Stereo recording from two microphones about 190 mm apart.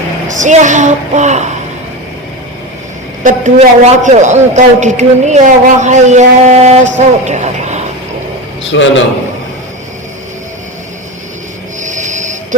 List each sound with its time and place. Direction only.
0.3 s a man's voice: 40° right (ahead or behind)
3.2 s a man's voice: 40° right (ahead or behind)
8.7 s a man's voice: 75° left (ahead or behind)
11.8 s a sound: 40° right (ahead or behind)